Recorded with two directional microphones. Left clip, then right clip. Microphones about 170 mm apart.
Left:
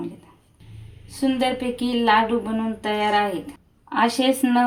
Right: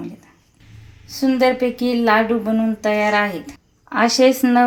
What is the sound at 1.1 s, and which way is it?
A woman's voice, 40° right (ahead or behind).